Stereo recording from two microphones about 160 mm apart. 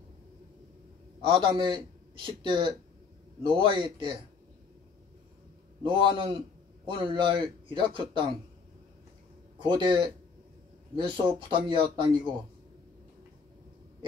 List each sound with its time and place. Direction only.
1.2 s a man's voice: 30° right (ahead or behind)
5.9 s a man's voice: 30° right (ahead or behind)
9.6 s a man's voice: 30° right (ahead or behind)